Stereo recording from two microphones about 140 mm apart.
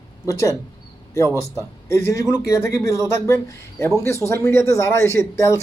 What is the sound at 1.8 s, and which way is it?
Speech, 20° left (ahead or behind).